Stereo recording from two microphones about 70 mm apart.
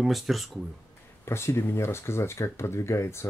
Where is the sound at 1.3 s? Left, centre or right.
Left.